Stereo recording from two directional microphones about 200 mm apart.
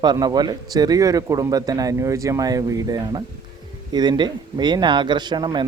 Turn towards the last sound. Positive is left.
turn(degrees=-20)  # may be behind; listen again after turning